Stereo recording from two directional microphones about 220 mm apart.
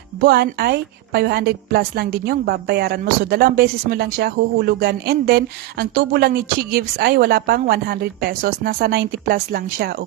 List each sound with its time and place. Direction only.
0.2 s a woman's voice: 45° right (ahead or behind)